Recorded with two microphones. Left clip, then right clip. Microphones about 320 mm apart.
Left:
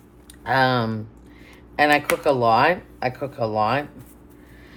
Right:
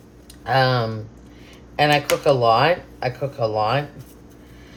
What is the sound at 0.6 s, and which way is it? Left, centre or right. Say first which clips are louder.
Speech: even; left.